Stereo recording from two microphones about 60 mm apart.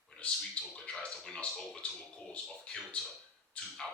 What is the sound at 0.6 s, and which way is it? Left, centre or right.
Speech, left.